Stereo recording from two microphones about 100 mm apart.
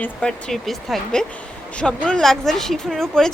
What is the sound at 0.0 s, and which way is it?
Speech, 10° left (ahead or behind).